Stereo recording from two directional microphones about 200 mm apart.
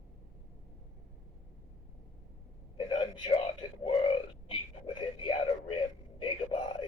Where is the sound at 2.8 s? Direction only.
25° left (ahead or behind).